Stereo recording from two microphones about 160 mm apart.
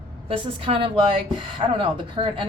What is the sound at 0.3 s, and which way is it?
Speech, 35° right (ahead or behind).